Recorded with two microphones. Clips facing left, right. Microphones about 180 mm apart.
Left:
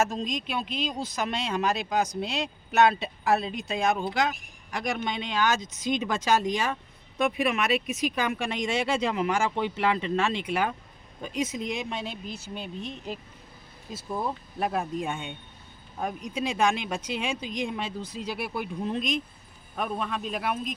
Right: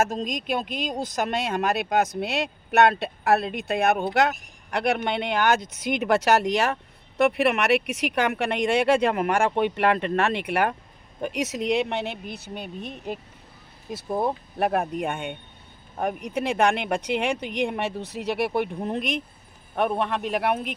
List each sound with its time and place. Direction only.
0.0 s speech: 45° right (ahead or behind)
14.2 s speech: 60° right (ahead or behind)